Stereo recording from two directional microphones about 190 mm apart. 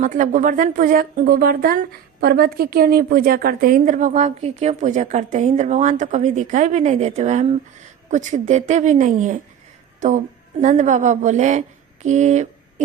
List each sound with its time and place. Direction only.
0.0 s speech: 45° right (ahead or behind)